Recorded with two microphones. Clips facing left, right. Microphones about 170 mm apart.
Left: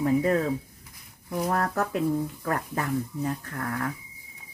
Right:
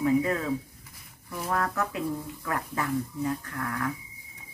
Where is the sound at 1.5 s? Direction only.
45° left (ahead or behind).